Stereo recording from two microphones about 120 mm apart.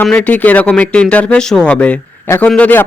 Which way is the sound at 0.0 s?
10° left (ahead or behind).